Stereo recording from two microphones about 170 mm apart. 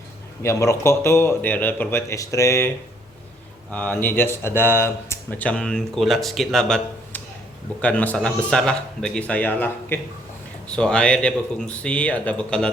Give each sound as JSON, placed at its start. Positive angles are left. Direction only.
{"t": 0.4, "sound": "speech", "side_deg": 15}